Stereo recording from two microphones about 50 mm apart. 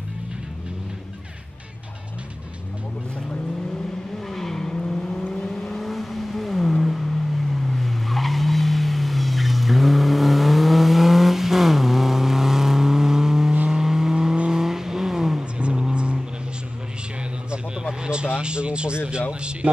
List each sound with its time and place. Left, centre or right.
4.3 s vehicle: centre; by 16.2 s right
18.0 s a sound: centre
19.6 s speech: right